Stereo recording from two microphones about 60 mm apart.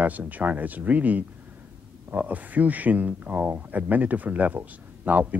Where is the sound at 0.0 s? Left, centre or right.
Right.